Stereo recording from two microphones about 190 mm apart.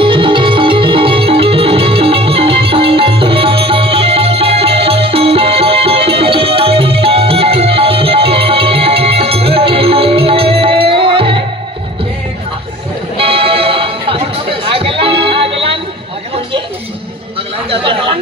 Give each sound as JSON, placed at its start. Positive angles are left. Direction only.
{"t": 0.0, "sound": "music", "side_deg": -25}
{"t": 13.2, "sound": "music", "side_deg": -30}
{"t": 17.6, "sound": "chatter", "side_deg": -30}